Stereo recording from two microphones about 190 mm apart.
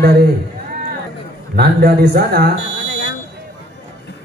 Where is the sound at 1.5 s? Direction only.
55° right (ahead or behind).